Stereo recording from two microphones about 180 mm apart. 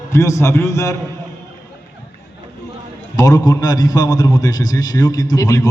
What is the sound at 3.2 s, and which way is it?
A man's voice, 20° left (ahead or behind).